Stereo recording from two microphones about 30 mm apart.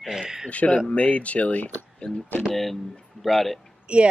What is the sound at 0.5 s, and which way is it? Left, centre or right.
Speech, left.